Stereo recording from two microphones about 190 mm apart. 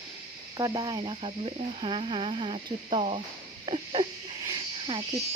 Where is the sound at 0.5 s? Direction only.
20° right (ahead or behind).